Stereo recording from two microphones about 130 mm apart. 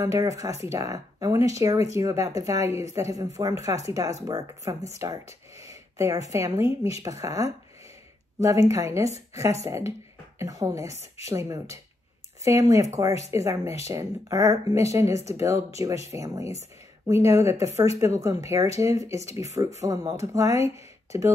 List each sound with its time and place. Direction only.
0.0 s a woman's voice: 25° right (ahead or behind)
19.6 s a woman's voice: 35° right (ahead or behind)